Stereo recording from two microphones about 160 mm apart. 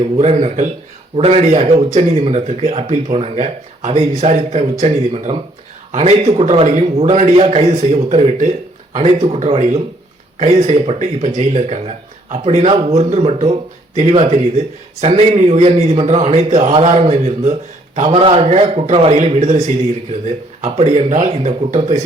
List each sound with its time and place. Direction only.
0.0 s a man's voice: 40° right (ahead or behind)